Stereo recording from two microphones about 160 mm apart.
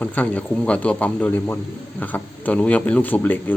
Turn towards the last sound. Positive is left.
turn(degrees=10)  # may be behind; listen again after turning